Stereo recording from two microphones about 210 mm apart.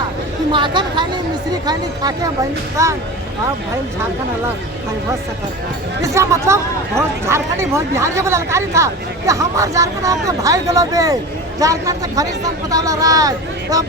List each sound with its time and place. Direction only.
0.5 s speech: 20° right (ahead or behind)
6.1 s speech: 15° right (ahead or behind)